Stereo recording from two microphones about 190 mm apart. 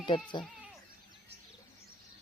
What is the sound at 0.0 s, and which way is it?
Speech, 25° left (ahead or behind).